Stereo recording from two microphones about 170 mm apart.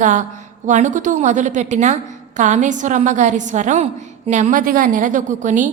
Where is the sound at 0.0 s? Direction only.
45° right (ahead or behind).